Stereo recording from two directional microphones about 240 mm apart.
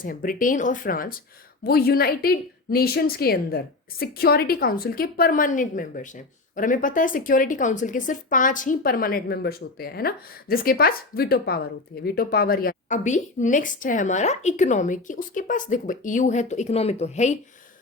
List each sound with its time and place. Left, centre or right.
0.0 s a woman's voice: left